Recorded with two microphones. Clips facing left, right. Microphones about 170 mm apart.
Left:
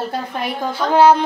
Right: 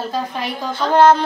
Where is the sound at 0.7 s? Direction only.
10° left (ahead or behind).